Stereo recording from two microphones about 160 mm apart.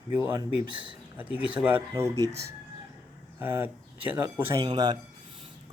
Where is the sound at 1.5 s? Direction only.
10° right (ahead or behind).